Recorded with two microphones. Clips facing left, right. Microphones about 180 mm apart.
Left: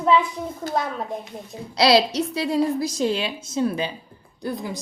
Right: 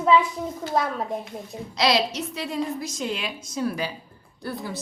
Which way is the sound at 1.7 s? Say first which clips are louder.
Left 5 dB; 35° left (ahead or behind).